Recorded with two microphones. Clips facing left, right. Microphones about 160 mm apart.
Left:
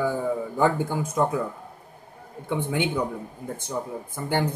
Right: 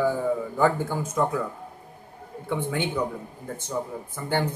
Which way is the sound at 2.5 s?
15° left (ahead or behind).